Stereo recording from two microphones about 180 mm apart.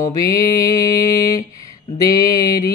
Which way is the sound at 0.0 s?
20° left (ahead or behind).